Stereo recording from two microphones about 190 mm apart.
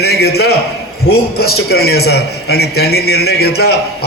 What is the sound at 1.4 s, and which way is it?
A man's voice, 55° left (ahead or behind).